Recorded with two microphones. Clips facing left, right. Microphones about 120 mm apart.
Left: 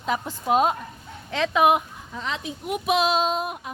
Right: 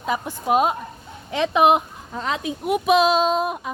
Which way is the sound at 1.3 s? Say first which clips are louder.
Right 3 dB; 20° right (ahead or behind).